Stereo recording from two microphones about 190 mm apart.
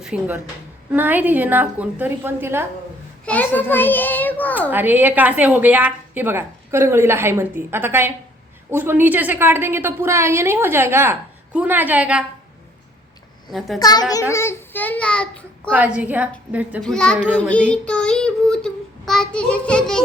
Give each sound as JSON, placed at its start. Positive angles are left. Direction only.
{"t": 0.0, "sound": "a woman's voice", "side_deg": -5}
{"t": 3.2, "sound": "a child's voice", "side_deg": 10}
{"t": 4.7, "sound": "a woman's voice", "side_deg": -10}
{"t": 13.5, "sound": "child singing", "side_deg": 0}
{"t": 13.7, "sound": "a child's voice", "side_deg": 20}
{"t": 15.7, "sound": "a woman's voice", "side_deg": -10}
{"t": 16.8, "sound": "child singing", "side_deg": 5}